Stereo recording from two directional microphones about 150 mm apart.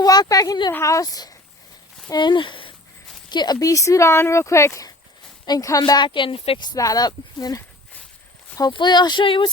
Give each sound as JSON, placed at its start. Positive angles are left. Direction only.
{"t": 0.0, "sound": "speech", "side_deg": 25}